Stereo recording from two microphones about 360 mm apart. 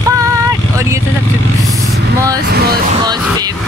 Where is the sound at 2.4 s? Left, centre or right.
Right.